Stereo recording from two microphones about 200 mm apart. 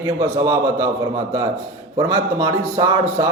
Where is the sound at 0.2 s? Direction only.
15° right (ahead or behind).